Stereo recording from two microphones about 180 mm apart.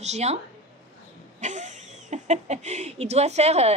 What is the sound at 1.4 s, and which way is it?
Speech, 40° right (ahead or behind).